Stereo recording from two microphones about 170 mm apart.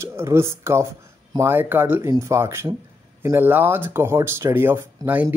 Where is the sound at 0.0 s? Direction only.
15° right (ahead or behind).